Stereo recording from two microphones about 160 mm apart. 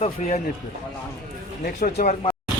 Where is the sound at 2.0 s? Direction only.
35° left (ahead or behind).